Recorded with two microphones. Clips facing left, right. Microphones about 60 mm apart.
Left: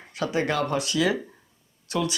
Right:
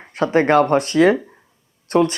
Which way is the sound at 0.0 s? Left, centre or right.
Right.